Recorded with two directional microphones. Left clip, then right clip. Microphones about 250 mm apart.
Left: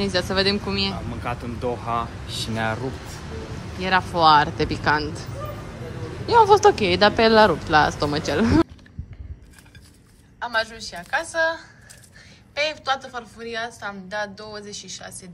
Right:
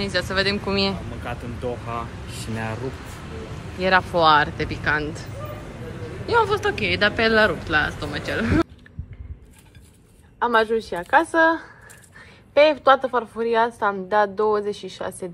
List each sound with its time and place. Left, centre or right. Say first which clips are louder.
0.0 s speech: left 1 dB; centre
1.2 s speech: left 3 dB; left
2.2 s speech: left 6 dB; centre
3.8 s speech: right 1 dB; centre
6.2 s speech: left 6 dB; centre
10.4 s a woman's voice: right 6 dB; centre